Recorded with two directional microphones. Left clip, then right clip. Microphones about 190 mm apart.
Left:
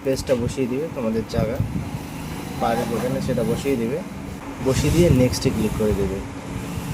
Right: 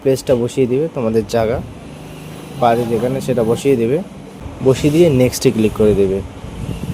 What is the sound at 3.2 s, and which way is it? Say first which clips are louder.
Speech: right 8 dB; 50° right (ahead or behind).